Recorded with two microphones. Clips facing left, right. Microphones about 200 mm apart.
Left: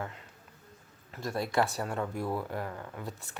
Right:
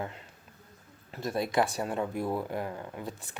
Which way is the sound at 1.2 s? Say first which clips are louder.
Right 2 dB; 20° right (ahead or behind).